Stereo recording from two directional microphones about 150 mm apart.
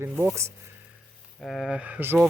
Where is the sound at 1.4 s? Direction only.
Centre (ahead or behind).